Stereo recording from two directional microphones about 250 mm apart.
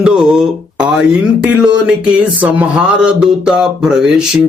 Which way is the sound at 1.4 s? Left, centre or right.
Centre.